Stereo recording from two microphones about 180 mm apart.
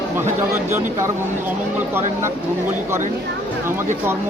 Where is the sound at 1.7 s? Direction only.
10° right (ahead or behind).